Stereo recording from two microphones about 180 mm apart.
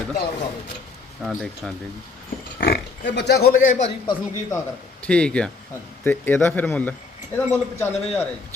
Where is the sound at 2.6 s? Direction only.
60° left (ahead or behind).